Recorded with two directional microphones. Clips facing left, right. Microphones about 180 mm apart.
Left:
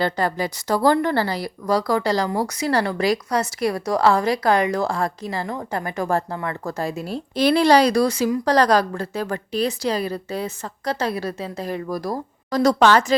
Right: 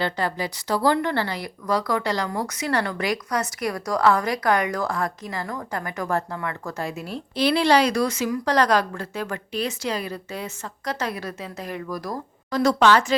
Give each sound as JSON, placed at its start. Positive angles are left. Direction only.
{"t": 0.0, "sound": "a woman's voice", "side_deg": 45}